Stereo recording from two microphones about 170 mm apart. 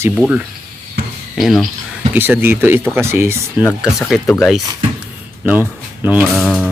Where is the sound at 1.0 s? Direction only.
75° right (ahead or behind).